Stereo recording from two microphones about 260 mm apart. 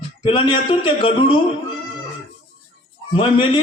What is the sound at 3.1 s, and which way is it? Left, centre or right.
Speech, centre.